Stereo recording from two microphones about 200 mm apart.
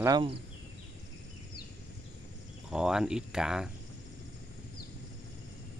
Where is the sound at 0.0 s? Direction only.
20° right (ahead or behind).